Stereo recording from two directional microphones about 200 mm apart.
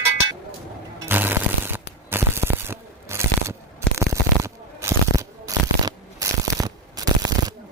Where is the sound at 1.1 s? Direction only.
10° right (ahead or behind).